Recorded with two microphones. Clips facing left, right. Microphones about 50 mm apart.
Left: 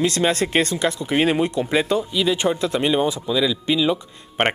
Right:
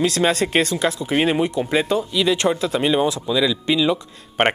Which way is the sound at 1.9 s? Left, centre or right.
Centre.